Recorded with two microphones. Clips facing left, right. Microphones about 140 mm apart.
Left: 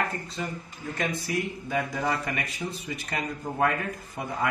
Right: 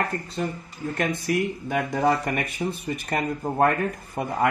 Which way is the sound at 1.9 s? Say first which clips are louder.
Right 6 dB; 35° right (ahead or behind).